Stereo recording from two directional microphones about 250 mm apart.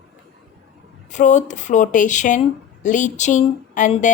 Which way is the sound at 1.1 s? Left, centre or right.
Left.